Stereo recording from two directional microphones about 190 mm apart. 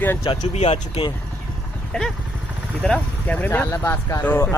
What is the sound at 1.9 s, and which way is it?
Speech, 5° left (ahead or behind).